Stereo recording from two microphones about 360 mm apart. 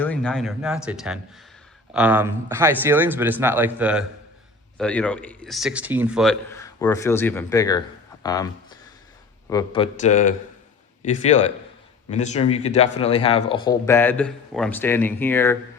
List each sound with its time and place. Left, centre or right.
0.0 s a man's voice: centre